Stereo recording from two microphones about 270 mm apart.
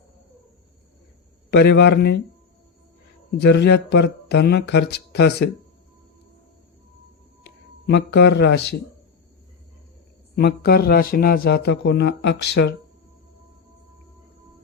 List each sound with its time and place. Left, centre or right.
1.5 s a man's voice: left
3.3 s a man's voice: left
7.4 s speech: left
10.3 s a man's voice: left